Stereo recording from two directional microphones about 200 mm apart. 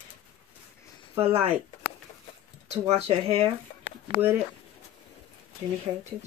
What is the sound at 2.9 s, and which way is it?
Speech, 30° right (ahead or behind).